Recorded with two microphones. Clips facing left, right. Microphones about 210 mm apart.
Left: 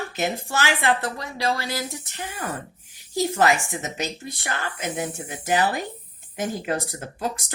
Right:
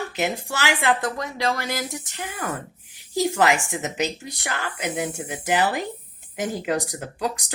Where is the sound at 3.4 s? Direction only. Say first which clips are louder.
Left 2 dB; 15° right (ahead or behind).